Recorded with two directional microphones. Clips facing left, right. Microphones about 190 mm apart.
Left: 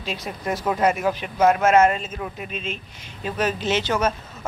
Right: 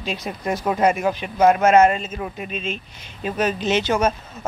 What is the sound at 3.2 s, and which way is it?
Speech, 15° right (ahead or behind).